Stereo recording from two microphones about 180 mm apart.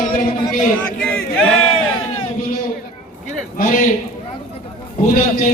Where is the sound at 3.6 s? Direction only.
45° left (ahead or behind).